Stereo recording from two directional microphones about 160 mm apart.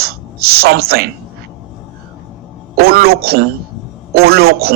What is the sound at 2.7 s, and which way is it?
Speech, 75° right (ahead or behind).